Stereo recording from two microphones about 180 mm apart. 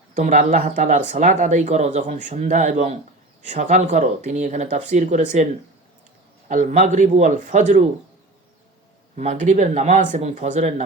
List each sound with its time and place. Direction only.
0.1 s speech: 45° right (ahead or behind)
6.5 s speech: 40° right (ahead or behind)
9.1 s speech: 40° right (ahead or behind)